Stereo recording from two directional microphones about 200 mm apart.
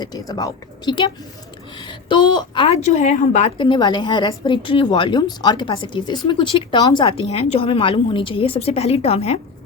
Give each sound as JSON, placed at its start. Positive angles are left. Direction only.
{"t": 0.0, "sound": "a woman's voice", "side_deg": 20}
{"t": 3.6, "sound": "a woman's voice", "side_deg": 20}